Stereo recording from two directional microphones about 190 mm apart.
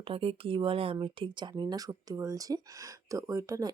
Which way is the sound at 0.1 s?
30° right (ahead or behind).